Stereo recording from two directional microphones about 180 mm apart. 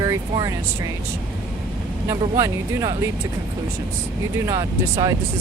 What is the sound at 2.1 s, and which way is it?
Speech, 20° right (ahead or behind).